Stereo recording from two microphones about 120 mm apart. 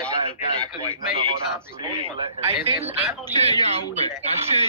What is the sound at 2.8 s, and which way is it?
Speech, 15° right (ahead or behind).